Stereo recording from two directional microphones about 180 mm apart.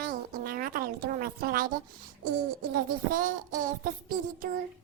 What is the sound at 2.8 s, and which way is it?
Child singing, 50° right (ahead or behind).